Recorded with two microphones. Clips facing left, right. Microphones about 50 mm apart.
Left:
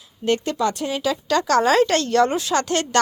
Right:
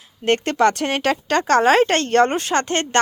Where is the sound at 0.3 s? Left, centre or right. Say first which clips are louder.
Right 4 dB; right.